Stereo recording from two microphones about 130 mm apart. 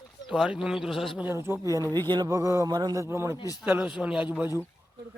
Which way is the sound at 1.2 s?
20° right (ahead or behind).